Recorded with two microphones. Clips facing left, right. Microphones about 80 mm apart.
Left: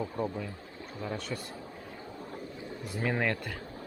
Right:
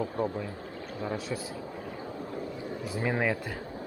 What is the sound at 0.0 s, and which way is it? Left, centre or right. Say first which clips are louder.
Speech: right 3 dB; right.